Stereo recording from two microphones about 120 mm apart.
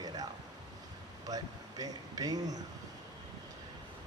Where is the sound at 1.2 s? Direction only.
30° right (ahead or behind).